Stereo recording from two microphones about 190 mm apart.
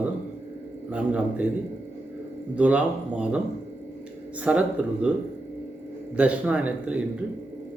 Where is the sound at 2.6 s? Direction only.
10° right (ahead or behind).